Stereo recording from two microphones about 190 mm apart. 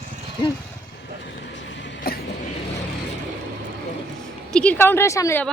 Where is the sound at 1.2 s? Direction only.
70° left (ahead or behind).